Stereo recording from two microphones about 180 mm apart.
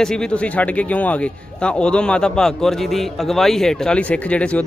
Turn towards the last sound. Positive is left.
turn(degrees=5)  # may be behind; listen again after turning